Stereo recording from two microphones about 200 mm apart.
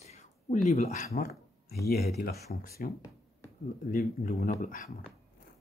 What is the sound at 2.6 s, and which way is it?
Speech, 50° left (ahead or behind).